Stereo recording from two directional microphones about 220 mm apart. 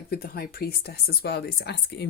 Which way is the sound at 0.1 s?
45° left (ahead or behind).